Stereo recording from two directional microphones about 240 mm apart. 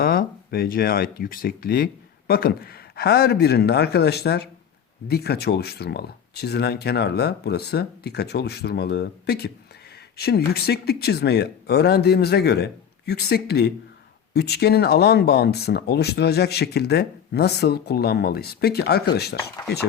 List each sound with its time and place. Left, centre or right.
0.0 s speech: left